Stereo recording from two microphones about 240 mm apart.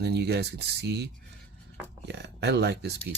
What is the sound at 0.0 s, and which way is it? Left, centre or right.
Speech, right.